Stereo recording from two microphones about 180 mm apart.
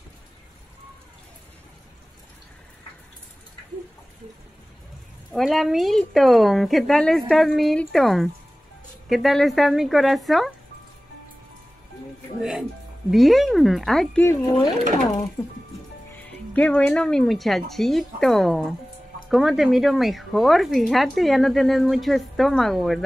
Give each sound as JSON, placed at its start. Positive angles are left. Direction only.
{"t": 5.3, "sound": "speech", "side_deg": 0}
{"t": 12.4, "sound": "speech", "side_deg": 0}
{"t": 14.2, "sound": "speech", "side_deg": 20}
{"t": 16.2, "sound": "speech", "side_deg": 10}